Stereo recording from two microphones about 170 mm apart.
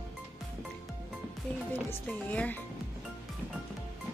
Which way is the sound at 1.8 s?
10° left (ahead or behind).